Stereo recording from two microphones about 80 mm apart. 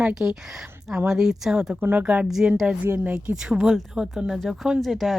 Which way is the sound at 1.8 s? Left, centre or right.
Right.